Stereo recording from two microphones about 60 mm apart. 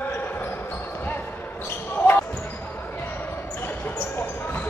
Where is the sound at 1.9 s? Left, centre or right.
Left.